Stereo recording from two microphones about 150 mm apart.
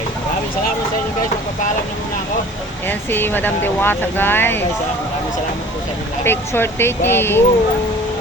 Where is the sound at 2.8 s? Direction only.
15° left (ahead or behind).